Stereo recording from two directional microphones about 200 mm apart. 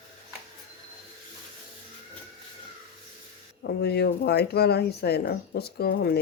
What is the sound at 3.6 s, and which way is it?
Speech, 55° left (ahead or behind).